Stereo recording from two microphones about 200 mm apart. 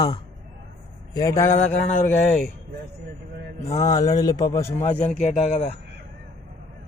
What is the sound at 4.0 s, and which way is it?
Speech, 20° left (ahead or behind).